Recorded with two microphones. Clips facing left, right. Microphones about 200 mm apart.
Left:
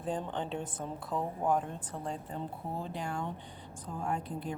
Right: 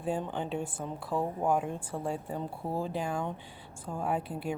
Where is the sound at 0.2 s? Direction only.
10° right (ahead or behind).